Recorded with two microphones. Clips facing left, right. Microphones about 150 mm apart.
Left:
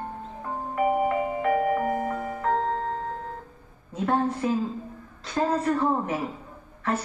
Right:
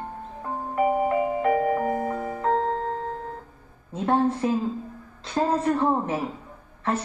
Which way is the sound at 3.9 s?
25° right (ahead or behind).